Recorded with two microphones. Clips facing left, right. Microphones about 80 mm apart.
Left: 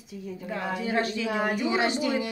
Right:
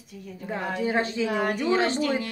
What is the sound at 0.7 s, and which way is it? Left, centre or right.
Speech, right.